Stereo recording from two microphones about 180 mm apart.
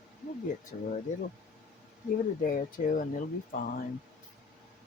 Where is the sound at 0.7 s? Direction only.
45° left (ahead or behind).